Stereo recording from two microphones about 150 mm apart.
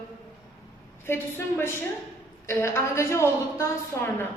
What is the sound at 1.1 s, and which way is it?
Speech, 15° left (ahead or behind).